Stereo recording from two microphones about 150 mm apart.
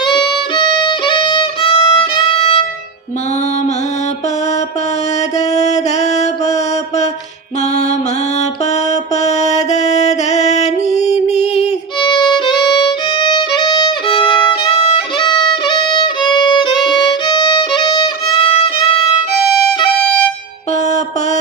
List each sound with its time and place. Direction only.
0.0 s violin: 30° left (ahead or behind)
5.5 s music: 50° left (ahead or behind)
8.9 s music: 50° left (ahead or behind)
11.9 s violin: 30° left (ahead or behind)
20.1 s music: 10° left (ahead or behind)